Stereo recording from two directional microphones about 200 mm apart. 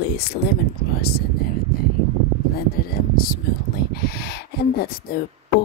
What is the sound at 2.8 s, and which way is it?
Speech, 45° left (ahead or behind).